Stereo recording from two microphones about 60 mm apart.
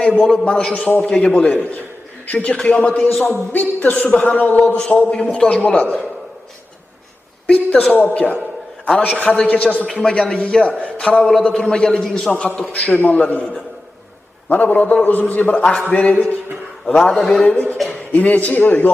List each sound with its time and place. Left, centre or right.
0.2 s a man's voice: centre
7.4 s a man's voice: left
8.9 s a man's voice: centre
12.3 s a man's voice: left
14.5 s a man's voice: left
17.0 s a man's voice: centre
17.4 s a man's voice: left